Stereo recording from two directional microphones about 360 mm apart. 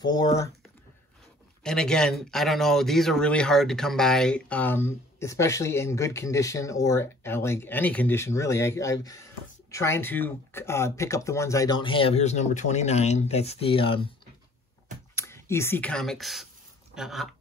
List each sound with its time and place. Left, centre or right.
0.0 s speech: centre
1.6 s speech: centre
15.1 s speech: centre